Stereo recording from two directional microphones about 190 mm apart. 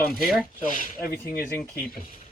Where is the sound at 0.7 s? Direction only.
45° left (ahead or behind).